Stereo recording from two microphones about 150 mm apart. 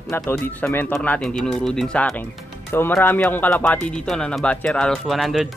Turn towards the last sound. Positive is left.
turn(degrees=0)  # may be behind; listen again after turning